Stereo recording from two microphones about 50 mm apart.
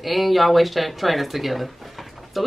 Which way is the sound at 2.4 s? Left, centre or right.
Centre.